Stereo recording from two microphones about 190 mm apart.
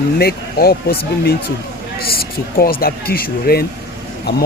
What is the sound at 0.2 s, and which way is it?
Speech, 55° left (ahead or behind).